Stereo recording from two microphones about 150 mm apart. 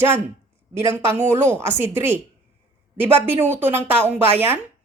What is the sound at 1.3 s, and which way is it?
Speech, 15° right (ahead or behind).